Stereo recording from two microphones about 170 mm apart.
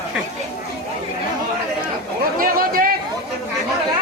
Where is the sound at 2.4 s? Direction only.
55° right (ahead or behind).